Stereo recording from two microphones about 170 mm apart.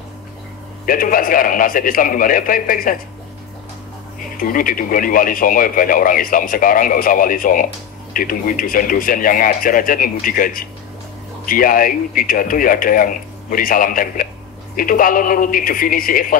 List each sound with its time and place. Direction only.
0.8 s speech: 55° left (ahead or behind)
4.4 s speech: 55° left (ahead or behind)